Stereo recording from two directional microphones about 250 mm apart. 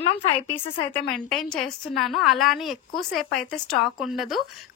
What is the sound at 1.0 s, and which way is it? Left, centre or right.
A woman's voice, centre.